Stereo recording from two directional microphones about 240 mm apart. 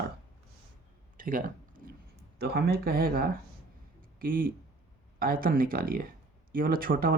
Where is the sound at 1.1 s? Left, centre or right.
Right.